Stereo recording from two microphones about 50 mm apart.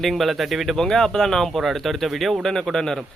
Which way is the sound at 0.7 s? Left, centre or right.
Centre.